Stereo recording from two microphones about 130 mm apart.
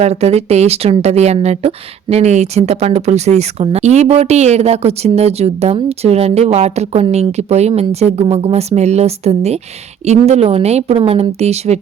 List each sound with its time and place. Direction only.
0.0 s a woman's voice: 55° right (ahead or behind)